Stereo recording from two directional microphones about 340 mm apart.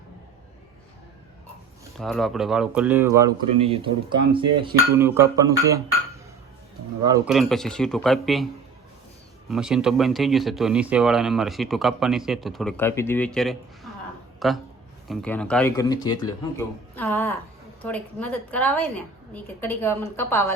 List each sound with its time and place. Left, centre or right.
2.0 s speech: centre
4.3 s a sound: centre
7.1 s speech: centre
9.5 s speech: centre